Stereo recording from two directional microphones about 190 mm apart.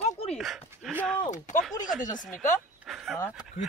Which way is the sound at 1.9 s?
45° left (ahead or behind).